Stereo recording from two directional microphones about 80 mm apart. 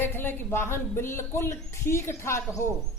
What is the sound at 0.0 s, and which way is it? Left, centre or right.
Speech, left.